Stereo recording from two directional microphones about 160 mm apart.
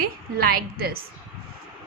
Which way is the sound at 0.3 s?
70° right (ahead or behind).